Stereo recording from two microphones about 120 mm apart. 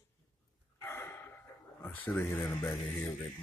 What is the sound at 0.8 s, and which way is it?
Gasp, 20° left (ahead or behind).